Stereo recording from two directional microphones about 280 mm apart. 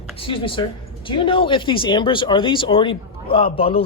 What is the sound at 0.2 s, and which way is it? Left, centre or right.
A man's voice, centre.